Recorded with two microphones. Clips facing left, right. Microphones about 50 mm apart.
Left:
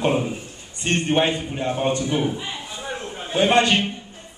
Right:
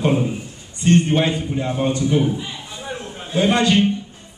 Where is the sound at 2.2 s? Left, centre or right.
Centre.